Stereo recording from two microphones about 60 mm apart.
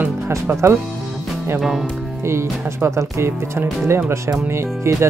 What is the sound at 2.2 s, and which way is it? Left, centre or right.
Speech, right.